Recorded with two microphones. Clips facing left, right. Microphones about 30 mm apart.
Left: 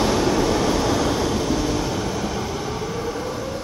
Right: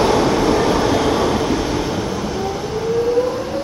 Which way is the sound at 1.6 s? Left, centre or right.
Right.